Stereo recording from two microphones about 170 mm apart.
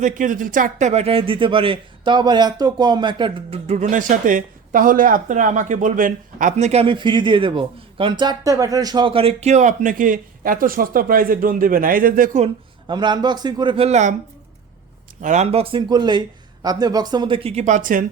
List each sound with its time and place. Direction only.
0.0 s speech: 50° right (ahead or behind)
12.9 s speech: 25° right (ahead or behind); by 14.2 s 45° right (ahead or behind)
15.2 s speech: 45° right (ahead or behind)